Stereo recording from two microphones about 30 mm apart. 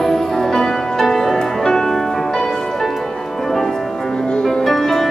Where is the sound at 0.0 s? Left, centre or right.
Centre.